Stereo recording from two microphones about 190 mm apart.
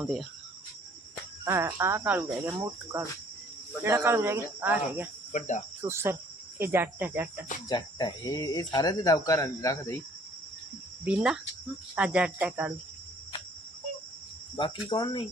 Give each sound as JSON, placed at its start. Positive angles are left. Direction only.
{"t": 0.0, "sound": "speech", "side_deg": 0}
{"t": 1.5, "sound": "speech", "side_deg": -15}
{"t": 5.3, "sound": "cricket", "side_deg": 40}
{"t": 5.8, "sound": "speech", "side_deg": -10}
{"t": 7.7, "sound": "speech", "side_deg": 20}
{"t": 11.0, "sound": "speech", "side_deg": -5}
{"t": 14.5, "sound": "speech", "side_deg": 25}